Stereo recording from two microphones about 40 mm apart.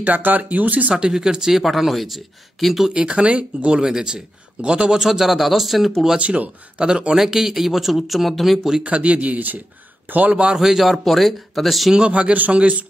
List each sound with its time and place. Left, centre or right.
0.0 s speech: right
0.9 s speech: centre
1.6 s speech: centre
2.9 s a man's voice: right
3.8 s a man's voice: centre
4.9 s speech: centre
6.1 s speech: right
6.9 s a man's voice: right; by 8.5 s centre
8.8 s a man's voice: right
10.5 s speech: centre
12.1 s a man's voice: right